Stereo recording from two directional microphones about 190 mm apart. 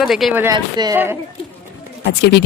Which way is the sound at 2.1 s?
60° left (ahead or behind).